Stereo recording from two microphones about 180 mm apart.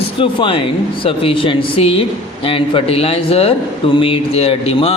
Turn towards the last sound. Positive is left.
turn(degrees=35)  # may be behind; listen again after turning